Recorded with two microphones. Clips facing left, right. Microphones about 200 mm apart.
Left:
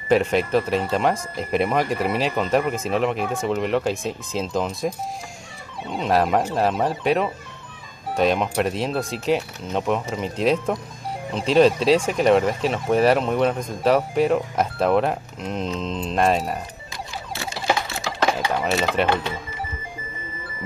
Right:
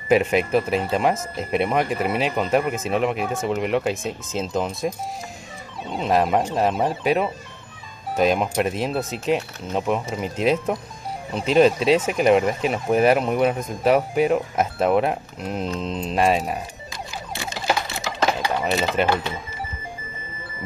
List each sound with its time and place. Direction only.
0.1 s speech: 5° right (ahead or behind)
5.9 s speech: centre (ahead or behind)
17.3 s a sound: 15° right (ahead or behind)
19.0 s speech: centre (ahead or behind)